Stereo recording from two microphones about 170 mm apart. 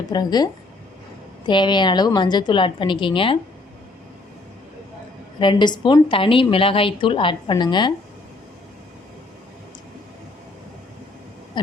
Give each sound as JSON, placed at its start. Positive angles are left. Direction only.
{"t": 0.1, "sound": "a woman's voice", "side_deg": 25}
{"t": 5.4, "sound": "a woman's voice", "side_deg": 25}
{"t": 11.6, "sound": "a woman's voice", "side_deg": 25}